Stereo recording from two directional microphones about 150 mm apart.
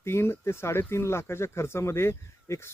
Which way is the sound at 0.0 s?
15° left (ahead or behind).